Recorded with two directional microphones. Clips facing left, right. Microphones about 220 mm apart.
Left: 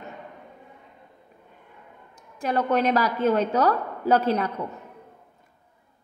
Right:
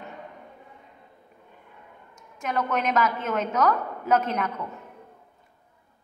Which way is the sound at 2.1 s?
35° left (ahead or behind).